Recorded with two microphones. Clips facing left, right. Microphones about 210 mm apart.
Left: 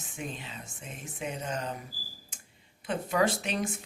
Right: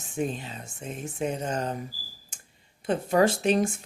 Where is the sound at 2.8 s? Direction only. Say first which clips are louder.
Right 5 dB; 45° right (ahead or behind).